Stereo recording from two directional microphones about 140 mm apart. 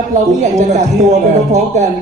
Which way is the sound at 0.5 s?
55° right (ahead or behind).